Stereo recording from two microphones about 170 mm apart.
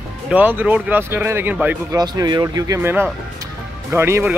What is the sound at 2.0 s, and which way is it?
Speech, 25° right (ahead or behind).